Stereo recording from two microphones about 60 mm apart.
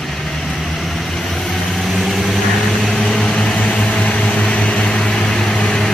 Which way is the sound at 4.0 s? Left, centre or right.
Left.